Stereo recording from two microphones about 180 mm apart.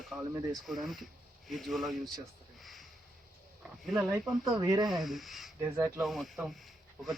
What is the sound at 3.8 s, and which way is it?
Speech, centre (ahead or behind).